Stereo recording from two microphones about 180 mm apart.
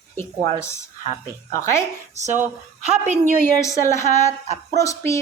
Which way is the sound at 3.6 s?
15° left (ahead or behind).